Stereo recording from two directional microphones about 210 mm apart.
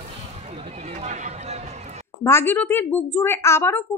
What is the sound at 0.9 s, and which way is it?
Run, 30° right (ahead or behind).